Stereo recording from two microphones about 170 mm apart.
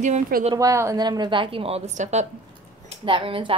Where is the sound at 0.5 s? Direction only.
20° right (ahead or behind); by 2.2 s 40° right (ahead or behind).